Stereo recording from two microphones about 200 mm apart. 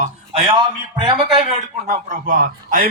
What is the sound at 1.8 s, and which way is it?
A man's voice, 45° right (ahead or behind).